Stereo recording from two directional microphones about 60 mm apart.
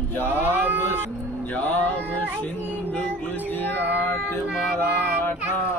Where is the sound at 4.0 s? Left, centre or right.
Left.